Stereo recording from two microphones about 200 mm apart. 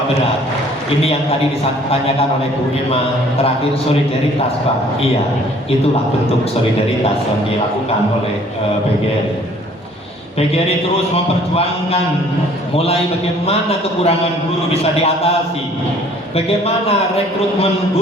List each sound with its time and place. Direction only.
11.1 s a man's voice: 30° left (ahead or behind)
16.3 s a man's voice: 30° left (ahead or behind)